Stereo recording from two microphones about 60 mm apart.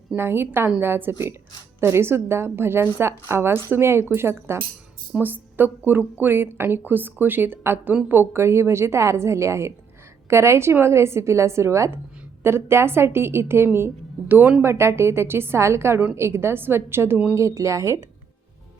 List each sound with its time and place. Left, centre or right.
0.2 s a woman's voice: right
14.6 s a woman's voice: right
17.3 s speech: right